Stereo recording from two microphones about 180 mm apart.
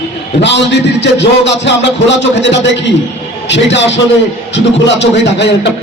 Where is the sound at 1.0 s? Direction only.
75° left (ahead or behind).